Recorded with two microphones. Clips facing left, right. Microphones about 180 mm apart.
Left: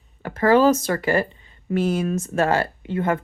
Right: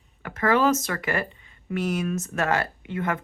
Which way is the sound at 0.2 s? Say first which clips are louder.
Left 6 dB; 30° left (ahead or behind).